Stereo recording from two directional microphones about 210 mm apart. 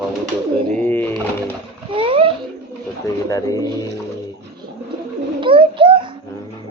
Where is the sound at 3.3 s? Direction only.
15° left (ahead or behind).